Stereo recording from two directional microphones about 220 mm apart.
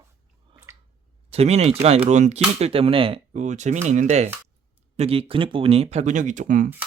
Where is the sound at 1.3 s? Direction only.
30° right (ahead or behind).